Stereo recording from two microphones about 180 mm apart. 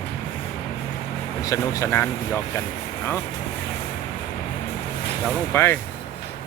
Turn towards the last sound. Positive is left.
turn(degrees=10)  # may be behind; listen again after turning